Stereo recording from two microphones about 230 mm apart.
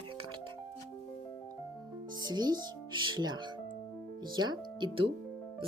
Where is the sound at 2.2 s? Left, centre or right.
Centre.